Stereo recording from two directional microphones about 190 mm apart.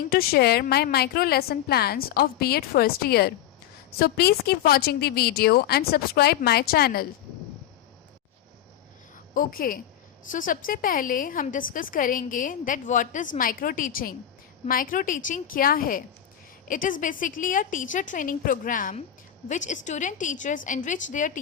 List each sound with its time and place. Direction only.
0.1 s a woman's voice: 55° left (ahead or behind)
9.3 s a woman's voice: 50° left (ahead or behind)